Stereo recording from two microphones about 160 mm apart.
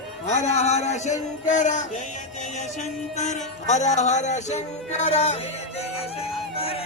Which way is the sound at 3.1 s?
45° left (ahead or behind).